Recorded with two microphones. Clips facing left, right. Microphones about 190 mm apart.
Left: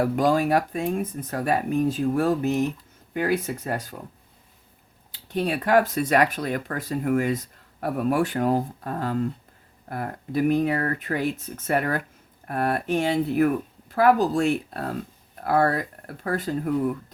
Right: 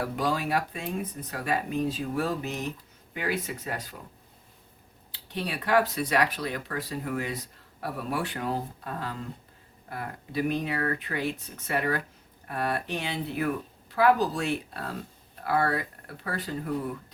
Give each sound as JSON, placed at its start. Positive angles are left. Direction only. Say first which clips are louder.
{"t": 0.0, "sound": "speech", "louder": "left 8 dB", "side_deg": 45}
{"t": 5.3, "sound": "speech", "louder": "left 5 dB", "side_deg": 50}